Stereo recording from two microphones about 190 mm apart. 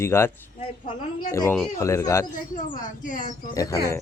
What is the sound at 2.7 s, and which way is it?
Speech, 45° left (ahead or behind).